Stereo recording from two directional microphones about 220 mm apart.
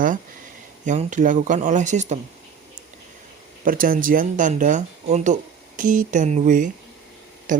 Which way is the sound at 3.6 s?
40° right (ahead or behind).